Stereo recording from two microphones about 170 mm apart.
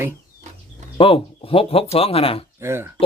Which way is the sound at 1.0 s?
30° left (ahead or behind).